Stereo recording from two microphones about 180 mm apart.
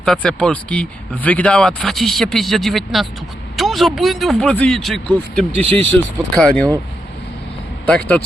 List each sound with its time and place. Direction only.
0.0 s speech: 5° left (ahead or behind)
5.5 s speech: 35° right (ahead or behind)
6.4 s speech: 5° left (ahead or behind)
7.9 s speech: 10° left (ahead or behind)